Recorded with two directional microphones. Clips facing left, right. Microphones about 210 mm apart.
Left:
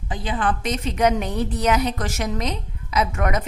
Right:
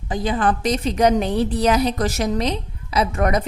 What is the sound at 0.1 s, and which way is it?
A woman's voice, 40° right (ahead or behind).